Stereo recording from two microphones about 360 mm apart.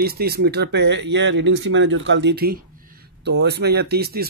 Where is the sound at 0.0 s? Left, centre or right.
Right.